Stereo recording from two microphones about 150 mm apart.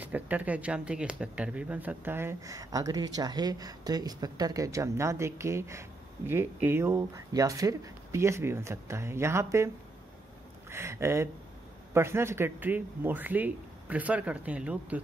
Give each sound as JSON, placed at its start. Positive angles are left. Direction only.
{"t": 0.0, "sound": "speech", "side_deg": -10}
{"t": 10.7, "sound": "speech", "side_deg": -15}